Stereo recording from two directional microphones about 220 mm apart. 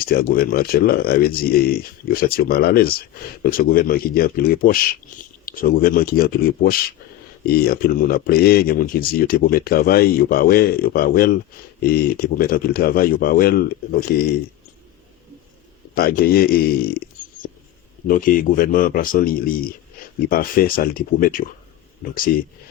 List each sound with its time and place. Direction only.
0.0 s speech: 40° left (ahead or behind)
16.0 s speech: 45° left (ahead or behind)
18.1 s speech: 40° left (ahead or behind)